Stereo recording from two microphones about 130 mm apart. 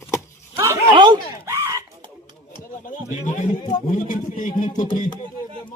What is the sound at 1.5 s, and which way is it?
Chicken, 25° right (ahead or behind).